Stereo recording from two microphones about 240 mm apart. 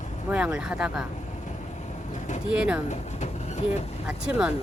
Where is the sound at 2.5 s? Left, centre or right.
Centre.